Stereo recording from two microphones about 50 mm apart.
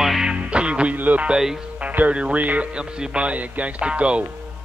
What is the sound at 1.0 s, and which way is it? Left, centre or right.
Music, right.